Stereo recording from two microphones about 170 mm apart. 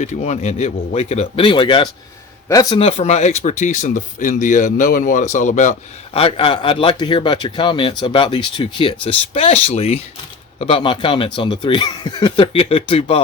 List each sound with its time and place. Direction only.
0.0 s speech: 40° left (ahead or behind); by 2.7 s 20° left (ahead or behind)
2.7 s speech: 35° left (ahead or behind)
6.1 s speech: 35° left (ahead or behind)